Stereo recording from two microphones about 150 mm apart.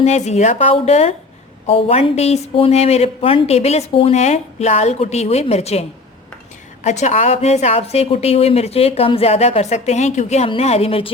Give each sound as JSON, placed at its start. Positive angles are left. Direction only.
{"t": 0.0, "sound": "speech", "side_deg": 50}
{"t": 6.8, "sound": "a woman's voice", "side_deg": 50}